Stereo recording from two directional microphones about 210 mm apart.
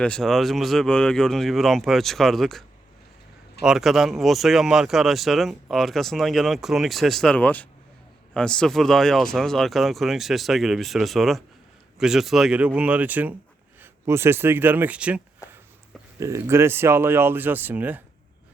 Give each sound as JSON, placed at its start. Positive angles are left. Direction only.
{"t": 0.0, "sound": "speech", "side_deg": 5}
{"t": 15.4, "sound": "a sound", "side_deg": 15}
{"t": 16.2, "sound": "speech", "side_deg": -15}